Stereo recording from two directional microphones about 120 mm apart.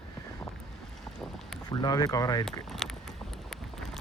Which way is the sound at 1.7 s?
35° left (ahead or behind).